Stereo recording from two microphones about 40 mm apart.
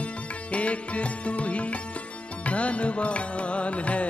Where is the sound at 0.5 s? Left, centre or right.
Left.